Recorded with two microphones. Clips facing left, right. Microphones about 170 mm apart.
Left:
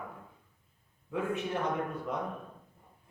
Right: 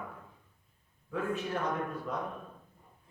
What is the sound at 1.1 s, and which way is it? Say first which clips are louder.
Speech: left 1 dB; 20° left (ahead or behind).